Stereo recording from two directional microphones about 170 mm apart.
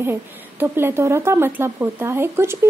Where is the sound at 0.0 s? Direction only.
15° right (ahead or behind).